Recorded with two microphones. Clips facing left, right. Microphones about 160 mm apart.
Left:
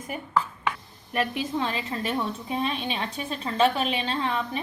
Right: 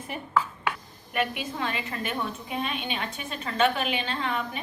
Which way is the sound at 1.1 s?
30° left (ahead or behind).